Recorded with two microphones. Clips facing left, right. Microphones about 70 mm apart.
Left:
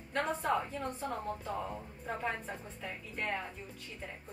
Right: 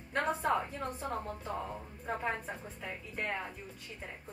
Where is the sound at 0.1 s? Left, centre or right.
Centre.